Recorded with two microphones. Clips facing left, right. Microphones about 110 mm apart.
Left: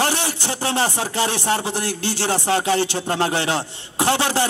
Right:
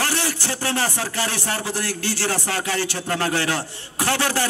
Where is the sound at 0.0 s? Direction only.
20° left (ahead or behind).